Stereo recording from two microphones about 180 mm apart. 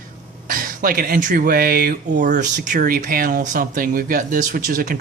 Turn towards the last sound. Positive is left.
turn(degrees=-50)  # may be behind; listen again after turning